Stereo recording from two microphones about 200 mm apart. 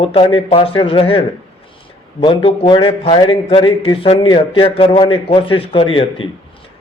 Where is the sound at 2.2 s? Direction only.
25° left (ahead or behind).